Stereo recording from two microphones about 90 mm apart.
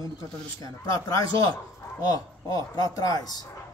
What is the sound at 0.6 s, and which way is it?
Speech, 40° left (ahead or behind).